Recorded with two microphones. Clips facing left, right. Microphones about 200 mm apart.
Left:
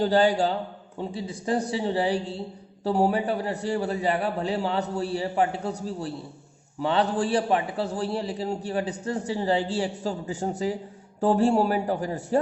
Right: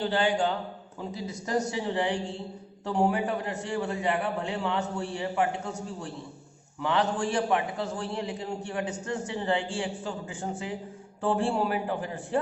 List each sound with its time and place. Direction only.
0.0 s a man's voice: 40° left (ahead or behind)